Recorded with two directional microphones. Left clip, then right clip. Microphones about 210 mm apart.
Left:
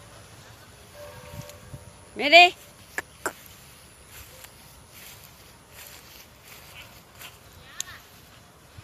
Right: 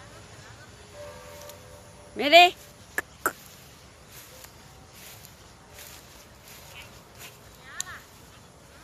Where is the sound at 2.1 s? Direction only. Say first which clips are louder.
Left 1 dB; centre (ahead or behind).